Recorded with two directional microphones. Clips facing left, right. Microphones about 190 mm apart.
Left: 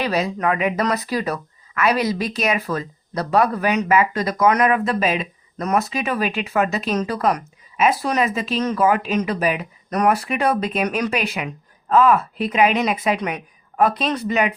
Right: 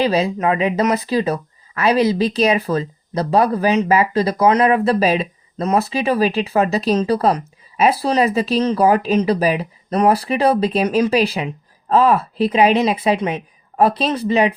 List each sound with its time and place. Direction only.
0.0 s speech: 25° right (ahead or behind)